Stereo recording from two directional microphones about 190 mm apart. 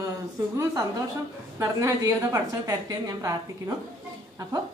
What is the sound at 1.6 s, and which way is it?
A woman's voice, 15° right (ahead or behind).